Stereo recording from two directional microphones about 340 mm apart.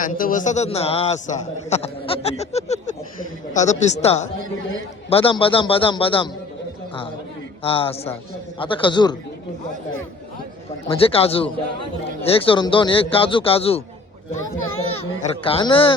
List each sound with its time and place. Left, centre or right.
0.0 s a man's voice: left
7.6 s speech: centre
10.8 s speech: centre
14.6 s children playing: left
15.4 s speech: centre